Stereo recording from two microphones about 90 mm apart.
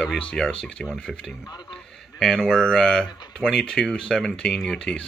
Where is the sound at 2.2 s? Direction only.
Centre (ahead or behind).